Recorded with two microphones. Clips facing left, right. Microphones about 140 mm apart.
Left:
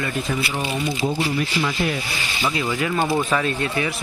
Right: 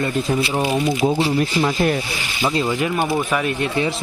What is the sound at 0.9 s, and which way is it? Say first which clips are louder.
Speech: right 5 dB; 50° right (ahead or behind).